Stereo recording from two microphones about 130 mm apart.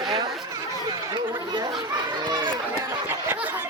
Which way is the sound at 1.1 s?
35° right (ahead or behind).